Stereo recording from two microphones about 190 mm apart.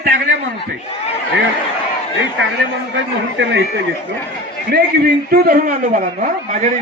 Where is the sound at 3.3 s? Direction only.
70° right (ahead or behind).